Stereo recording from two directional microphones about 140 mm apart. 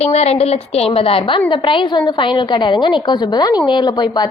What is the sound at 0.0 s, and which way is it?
A woman's voice, 50° left (ahead or behind).